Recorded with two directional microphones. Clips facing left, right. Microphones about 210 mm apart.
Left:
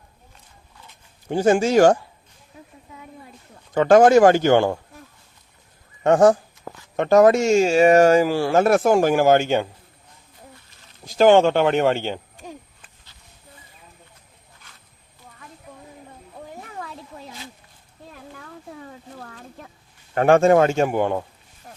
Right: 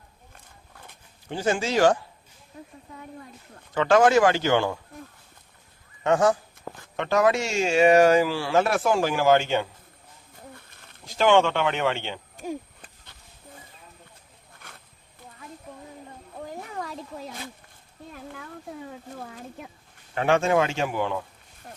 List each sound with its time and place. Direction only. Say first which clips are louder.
0.3 s a sound: right 2 dB; 50° right (ahead or behind)
1.3 s speech: left 8 dB; 50° left (ahead or behind)
3.8 s speech: left 6 dB; 45° left (ahead or behind)
6.0 s speech: left 6 dB; 45° left (ahead or behind)
10.5 s a sound: right 2 dB; 55° right (ahead or behind)
11.0 s speech: left 6 dB; 40° left (ahead or behind)
16.8 s a sound: right 2 dB; centre (ahead or behind)
19.2 s speech: right 1 dB; 10° right (ahead or behind)
20.1 s speech: left 7 dB; 50° left (ahead or behind)